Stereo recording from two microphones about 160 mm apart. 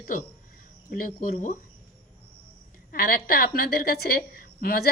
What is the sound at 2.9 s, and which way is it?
A woman's voice, 65° left (ahead or behind).